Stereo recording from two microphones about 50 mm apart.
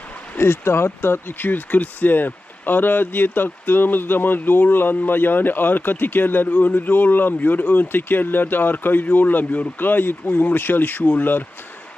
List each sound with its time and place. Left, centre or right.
0.3 s speech: left